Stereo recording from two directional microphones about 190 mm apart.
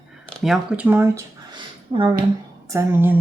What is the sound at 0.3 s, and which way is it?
Speech, centre (ahead or behind).